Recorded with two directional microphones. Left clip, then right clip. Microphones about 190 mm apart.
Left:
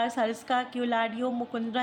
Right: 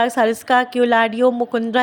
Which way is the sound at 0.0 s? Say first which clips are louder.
Right 11 dB; 50° right (ahead or behind).